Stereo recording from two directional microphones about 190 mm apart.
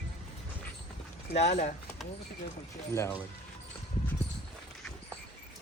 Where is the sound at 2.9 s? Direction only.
15° left (ahead or behind).